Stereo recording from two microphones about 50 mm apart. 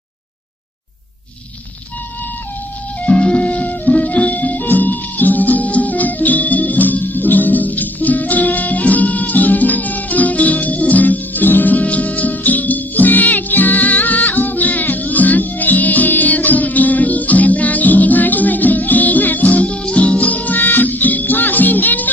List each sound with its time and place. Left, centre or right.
3.0 s music: left